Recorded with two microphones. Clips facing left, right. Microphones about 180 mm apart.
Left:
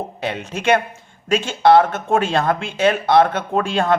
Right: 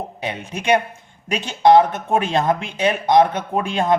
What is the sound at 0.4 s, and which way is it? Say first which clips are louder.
Speech: even; 15° right (ahead or behind).